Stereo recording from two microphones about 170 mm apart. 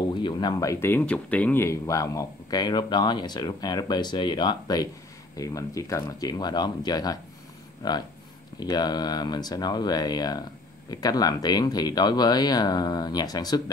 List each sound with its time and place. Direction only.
0.1 s speech: 25° left (ahead or behind)